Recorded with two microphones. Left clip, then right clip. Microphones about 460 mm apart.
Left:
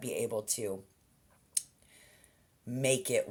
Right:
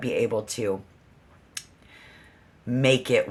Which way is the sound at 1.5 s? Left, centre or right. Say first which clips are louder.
Right 2 dB; left.